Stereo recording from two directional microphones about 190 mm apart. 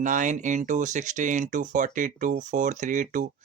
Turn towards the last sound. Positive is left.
turn(degrees=-45)  # may be behind; listen again after turning